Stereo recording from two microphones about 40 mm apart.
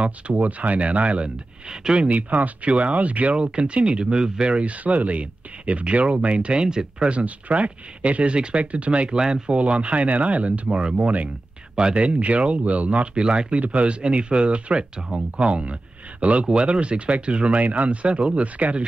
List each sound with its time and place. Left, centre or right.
0.4 s speech: right
1.7 s speech: centre
2.0 s speech: right
6.6 s speech: centre
7.1 s speech: right
9.2 s speech: centre
9.6 s speech: right
10.7 s speech: right
11.0 s speech: right
11.7 s speech: right